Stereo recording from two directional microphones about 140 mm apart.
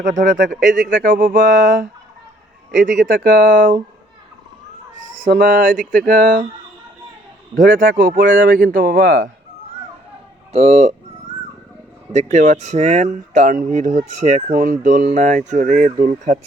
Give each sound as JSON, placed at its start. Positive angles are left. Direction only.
{"t": 0.0, "sound": "speech", "side_deg": -70}
{"t": 4.9, "sound": "speech", "side_deg": -65}
{"t": 7.5, "sound": "a man's voice", "side_deg": -80}
{"t": 10.5, "sound": "speech", "side_deg": -50}
{"t": 12.1, "sound": "speech", "side_deg": -55}